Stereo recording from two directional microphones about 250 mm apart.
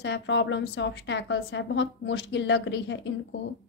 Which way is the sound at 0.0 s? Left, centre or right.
Left.